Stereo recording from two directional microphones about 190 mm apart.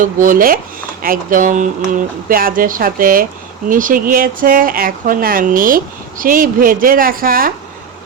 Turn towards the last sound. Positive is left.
turn(degrees=-50)  # may be behind; listen again after turning